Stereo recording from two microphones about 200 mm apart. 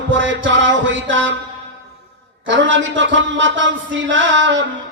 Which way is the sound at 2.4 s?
70° right (ahead or behind).